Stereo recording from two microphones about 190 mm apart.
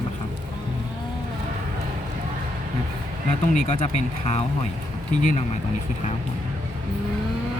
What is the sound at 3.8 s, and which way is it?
Speech, 35° left (ahead or behind).